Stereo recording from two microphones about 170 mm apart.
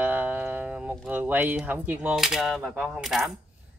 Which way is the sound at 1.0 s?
10° right (ahead or behind).